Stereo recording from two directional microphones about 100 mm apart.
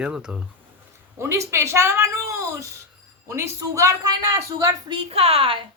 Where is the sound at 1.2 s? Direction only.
30° right (ahead or behind).